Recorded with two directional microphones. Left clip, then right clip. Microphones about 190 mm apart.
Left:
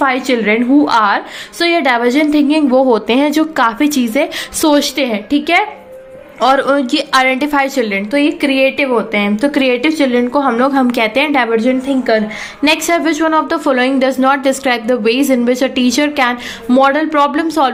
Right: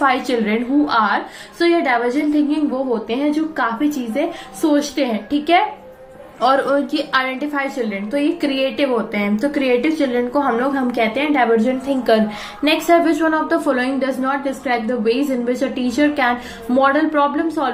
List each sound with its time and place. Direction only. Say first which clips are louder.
0.0 s a woman's voice: left 4 dB; 25° left (ahead or behind)
11.5 s a woman's voice: left 4 dB; 15° left (ahead or behind)